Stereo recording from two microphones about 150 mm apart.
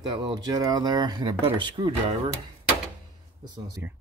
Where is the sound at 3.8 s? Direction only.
10° right (ahead or behind).